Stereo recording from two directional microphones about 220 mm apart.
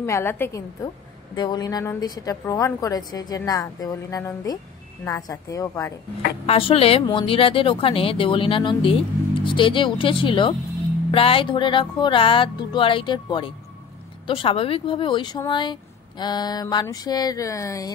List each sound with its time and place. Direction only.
0.0 s a woman's voice: 10° left (ahead or behind)
6.4 s speech: 25° left (ahead or behind)